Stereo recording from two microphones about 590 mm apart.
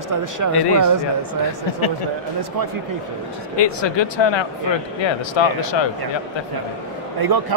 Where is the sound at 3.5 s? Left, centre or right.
Left.